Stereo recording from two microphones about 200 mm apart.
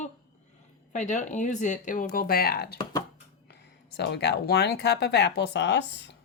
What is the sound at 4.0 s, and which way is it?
Speech, 60° left (ahead or behind).